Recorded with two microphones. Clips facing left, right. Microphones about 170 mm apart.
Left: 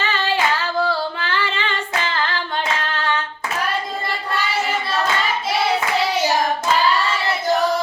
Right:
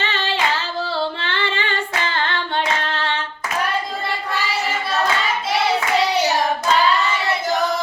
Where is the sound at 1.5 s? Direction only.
30° left (ahead or behind).